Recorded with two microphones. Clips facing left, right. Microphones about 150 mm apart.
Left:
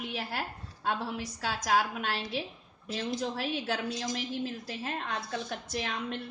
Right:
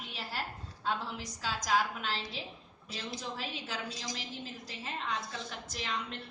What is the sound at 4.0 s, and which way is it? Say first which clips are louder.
A woman's voice: left 8 dB; 55° left (ahead or behind).